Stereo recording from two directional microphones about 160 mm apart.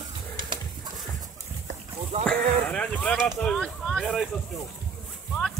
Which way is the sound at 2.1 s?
40° right (ahead or behind).